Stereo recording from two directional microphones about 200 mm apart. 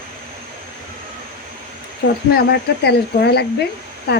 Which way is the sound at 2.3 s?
55° left (ahead or behind).